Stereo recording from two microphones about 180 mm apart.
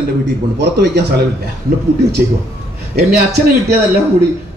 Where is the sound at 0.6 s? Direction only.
70° right (ahead or behind).